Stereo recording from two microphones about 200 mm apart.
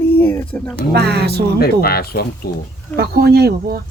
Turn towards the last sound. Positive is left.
turn(degrees=-55)  # may be behind; listen again after turning